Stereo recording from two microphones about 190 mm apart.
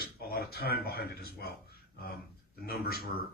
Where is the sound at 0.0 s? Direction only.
55° left (ahead or behind).